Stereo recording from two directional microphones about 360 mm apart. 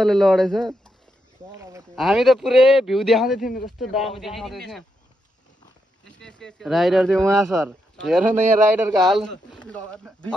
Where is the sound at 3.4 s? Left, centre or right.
Left.